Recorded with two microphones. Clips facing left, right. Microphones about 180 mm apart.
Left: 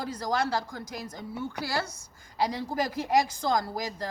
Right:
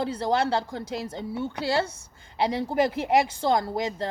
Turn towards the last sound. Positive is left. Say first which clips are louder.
# right 4 dB
turn(degrees=-25)  # may be behind; listen again after turning